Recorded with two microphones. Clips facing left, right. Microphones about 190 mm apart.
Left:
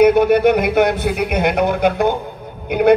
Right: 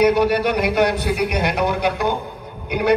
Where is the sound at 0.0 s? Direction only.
50° left (ahead or behind).